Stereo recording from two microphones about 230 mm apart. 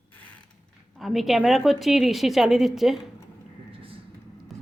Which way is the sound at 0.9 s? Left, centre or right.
Centre.